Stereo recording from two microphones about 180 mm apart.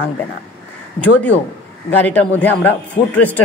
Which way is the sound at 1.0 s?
10° left (ahead or behind).